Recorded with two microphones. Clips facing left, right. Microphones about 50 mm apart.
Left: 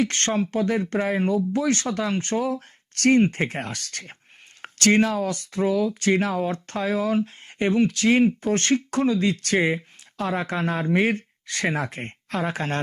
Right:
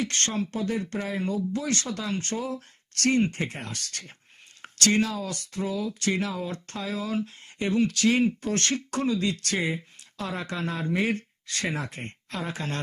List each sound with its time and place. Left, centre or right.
0.0 s speech: left